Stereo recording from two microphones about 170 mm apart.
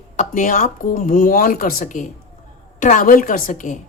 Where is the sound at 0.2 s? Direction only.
50° left (ahead or behind).